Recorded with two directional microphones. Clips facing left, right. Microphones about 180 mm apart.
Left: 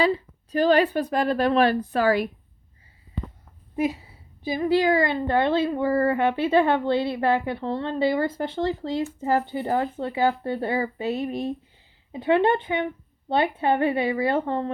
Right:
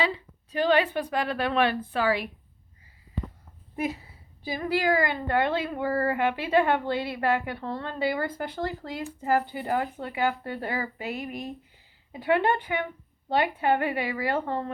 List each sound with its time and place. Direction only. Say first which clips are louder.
0.0 s a woman's voice: left 6 dB; 40° left (ahead or behind)
4.4 s a child's voice: left 5 dB; 20° left (ahead or behind)